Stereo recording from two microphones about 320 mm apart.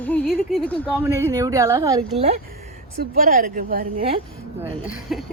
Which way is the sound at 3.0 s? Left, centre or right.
Right.